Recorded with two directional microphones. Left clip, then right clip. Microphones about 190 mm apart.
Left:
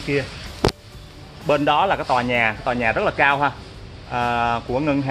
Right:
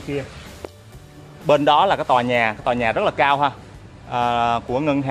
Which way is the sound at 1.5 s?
40° right (ahead or behind).